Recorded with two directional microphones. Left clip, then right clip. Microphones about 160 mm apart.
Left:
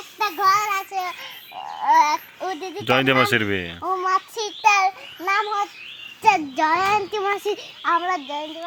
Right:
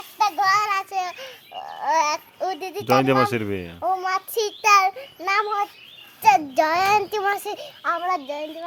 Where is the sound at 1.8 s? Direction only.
35° right (ahead or behind).